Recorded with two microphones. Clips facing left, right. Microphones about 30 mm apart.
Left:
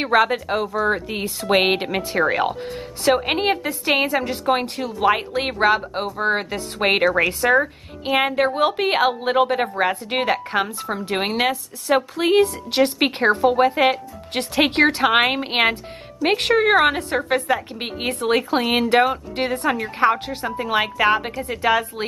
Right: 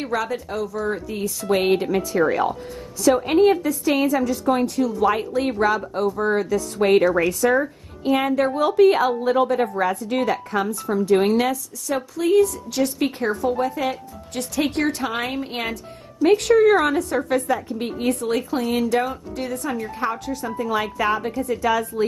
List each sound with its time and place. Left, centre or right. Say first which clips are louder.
0.0 s a woman's voice: left 7 dB; left